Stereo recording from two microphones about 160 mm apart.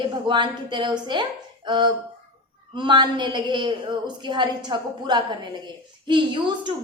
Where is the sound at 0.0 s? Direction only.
30° right (ahead or behind).